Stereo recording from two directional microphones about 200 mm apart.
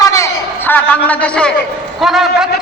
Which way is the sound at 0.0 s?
15° left (ahead or behind).